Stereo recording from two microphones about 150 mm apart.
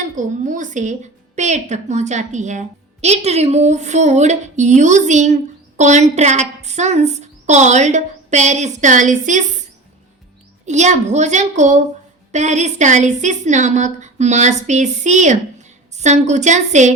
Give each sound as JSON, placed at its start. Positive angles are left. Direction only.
{"t": 0.2, "sound": "a woman's voice", "side_deg": -55}
{"t": 10.7, "sound": "a woman's voice", "side_deg": -50}